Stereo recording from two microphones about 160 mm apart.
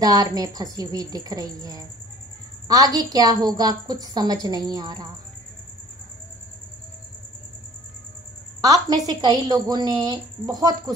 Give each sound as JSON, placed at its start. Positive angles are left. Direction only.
{"t": 0.0, "sound": "a woman's voice", "side_deg": -25}
{"t": 8.5, "sound": "a woman's voice", "side_deg": -20}